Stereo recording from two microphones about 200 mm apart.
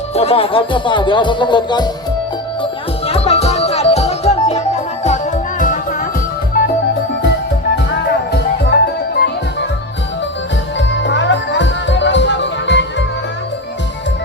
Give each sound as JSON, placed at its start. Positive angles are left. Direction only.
{"t": 0.1, "sound": "music", "side_deg": 30}
{"t": 3.1, "sound": "music", "side_deg": 30}
{"t": 7.9, "sound": "music", "side_deg": 55}
{"t": 10.8, "sound": "music", "side_deg": 65}